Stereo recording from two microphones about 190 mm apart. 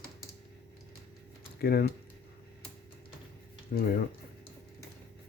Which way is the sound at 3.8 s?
50° left (ahead or behind).